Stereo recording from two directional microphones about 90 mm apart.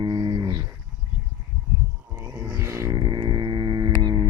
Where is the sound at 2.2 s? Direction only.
40° right (ahead or behind).